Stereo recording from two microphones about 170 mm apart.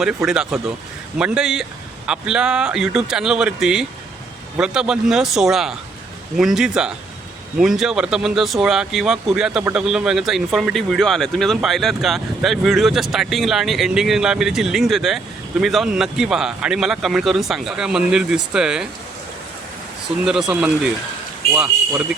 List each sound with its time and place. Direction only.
0.3 s speech: centre (ahead or behind)
20.5 s speech: 5° right (ahead or behind)